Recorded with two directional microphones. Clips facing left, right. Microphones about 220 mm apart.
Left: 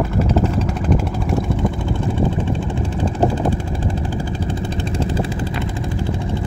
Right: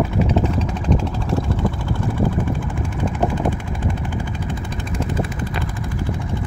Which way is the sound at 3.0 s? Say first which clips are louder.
Left 2 dB; 35° left (ahead or behind).